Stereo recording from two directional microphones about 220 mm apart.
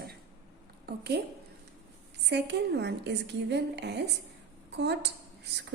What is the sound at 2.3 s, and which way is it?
A woman's voice, 50° right (ahead or behind).